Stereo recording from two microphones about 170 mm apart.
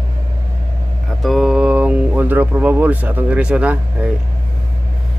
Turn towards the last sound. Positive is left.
turn(degrees=-5)  # may be behind; listen again after turning